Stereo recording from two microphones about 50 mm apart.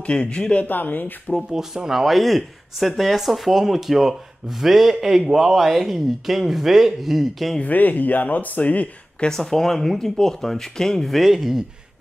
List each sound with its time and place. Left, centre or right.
0.2 s speech: centre
0.7 s speech: left
1.3 s speech: centre
7.6 s speech: left
9.2 s speech: centre